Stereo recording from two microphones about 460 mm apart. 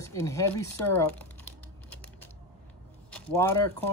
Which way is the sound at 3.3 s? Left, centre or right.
Centre.